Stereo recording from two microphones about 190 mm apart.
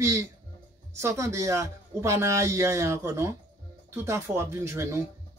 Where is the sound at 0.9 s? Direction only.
15° right (ahead or behind).